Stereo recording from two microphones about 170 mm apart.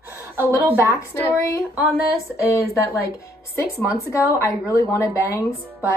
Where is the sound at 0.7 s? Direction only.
15° left (ahead or behind).